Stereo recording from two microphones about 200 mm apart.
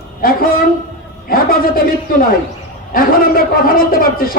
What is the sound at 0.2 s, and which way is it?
A man's voice, 45° left (ahead or behind).